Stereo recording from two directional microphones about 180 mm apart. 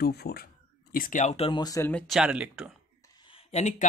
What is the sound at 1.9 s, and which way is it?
Speech, 5° left (ahead or behind).